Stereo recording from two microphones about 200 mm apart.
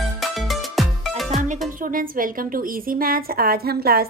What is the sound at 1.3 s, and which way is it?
Music, 40° right (ahead or behind).